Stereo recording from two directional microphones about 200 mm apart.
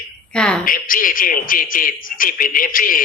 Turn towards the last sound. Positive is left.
turn(degrees=45)  # may be behind; listen again after turning